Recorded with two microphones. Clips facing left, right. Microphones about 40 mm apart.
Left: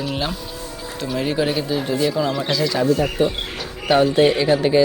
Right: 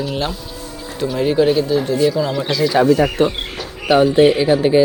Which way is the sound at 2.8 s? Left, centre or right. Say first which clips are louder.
Right 4 dB; right.